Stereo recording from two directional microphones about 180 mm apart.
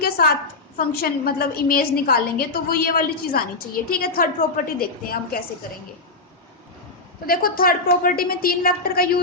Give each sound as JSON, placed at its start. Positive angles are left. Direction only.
{"t": 0.0, "sound": "a woman's voice", "side_deg": 55}
{"t": 7.3, "sound": "a woman's voice", "side_deg": 55}